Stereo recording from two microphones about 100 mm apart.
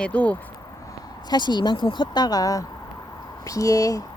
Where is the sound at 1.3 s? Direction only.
45° left (ahead or behind).